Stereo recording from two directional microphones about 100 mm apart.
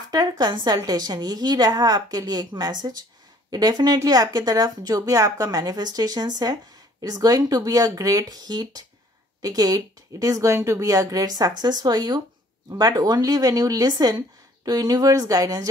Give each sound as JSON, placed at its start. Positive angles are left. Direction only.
{"t": 0.1, "sound": "a woman's voice", "side_deg": -40}